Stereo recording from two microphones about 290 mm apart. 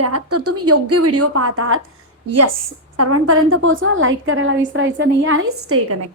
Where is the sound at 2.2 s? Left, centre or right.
Right.